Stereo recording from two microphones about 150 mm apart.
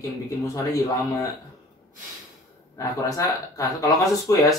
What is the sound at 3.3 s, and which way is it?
Speech, 25° left (ahead or behind).